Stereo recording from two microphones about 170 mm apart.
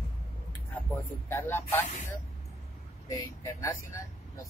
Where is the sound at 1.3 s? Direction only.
15° left (ahead or behind).